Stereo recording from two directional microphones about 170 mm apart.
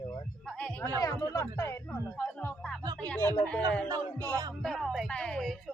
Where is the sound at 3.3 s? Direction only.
5° left (ahead or behind).